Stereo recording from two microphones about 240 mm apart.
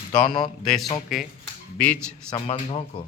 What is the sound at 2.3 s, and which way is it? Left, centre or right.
Speech, left.